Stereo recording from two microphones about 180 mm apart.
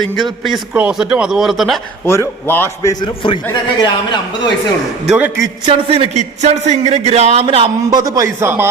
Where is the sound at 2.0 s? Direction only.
15° left (ahead or behind).